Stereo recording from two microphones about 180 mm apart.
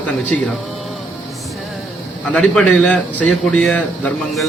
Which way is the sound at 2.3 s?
5° left (ahead or behind).